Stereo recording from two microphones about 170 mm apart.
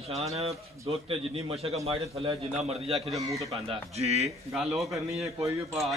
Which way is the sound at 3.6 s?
40° right (ahead or behind).